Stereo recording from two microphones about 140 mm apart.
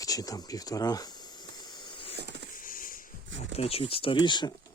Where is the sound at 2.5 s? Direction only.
80° left.